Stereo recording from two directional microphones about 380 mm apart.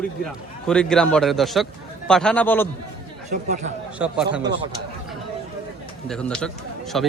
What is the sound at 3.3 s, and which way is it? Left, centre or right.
Speech, centre.